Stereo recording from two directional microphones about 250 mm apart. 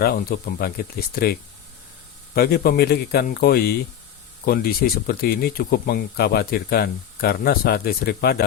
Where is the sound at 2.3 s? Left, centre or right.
Left.